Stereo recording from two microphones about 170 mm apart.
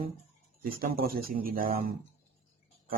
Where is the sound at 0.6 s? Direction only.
60° right (ahead or behind).